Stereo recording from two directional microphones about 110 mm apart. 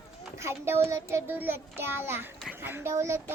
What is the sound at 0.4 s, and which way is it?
A child's voice, 25° right (ahead or behind).